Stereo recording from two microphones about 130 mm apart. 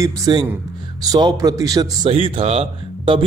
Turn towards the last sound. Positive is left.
turn(degrees=-50)  # may be behind; listen again after turning